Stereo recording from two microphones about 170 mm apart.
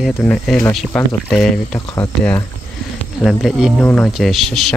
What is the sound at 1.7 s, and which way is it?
Speech, 15° left (ahead or behind).